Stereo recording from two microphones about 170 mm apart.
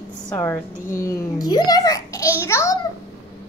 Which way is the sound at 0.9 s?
20° left (ahead or behind).